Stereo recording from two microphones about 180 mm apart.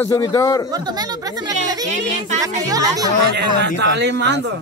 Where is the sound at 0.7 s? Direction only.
20° right (ahead or behind).